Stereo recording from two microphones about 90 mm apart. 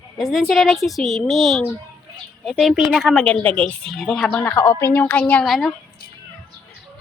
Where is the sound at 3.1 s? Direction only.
10° left (ahead or behind).